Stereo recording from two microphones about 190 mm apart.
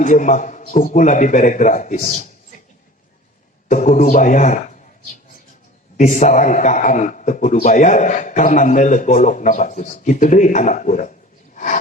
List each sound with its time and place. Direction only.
0.0 s a man's voice: 40° left (ahead or behind)
3.7 s a man's voice: 40° left (ahead or behind)
6.0 s a man's voice: 40° left (ahead or behind)
11.5 s a sound: 40° left (ahead or behind)